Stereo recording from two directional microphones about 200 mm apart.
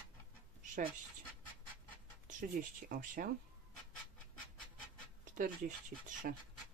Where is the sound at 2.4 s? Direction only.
45° right (ahead or behind).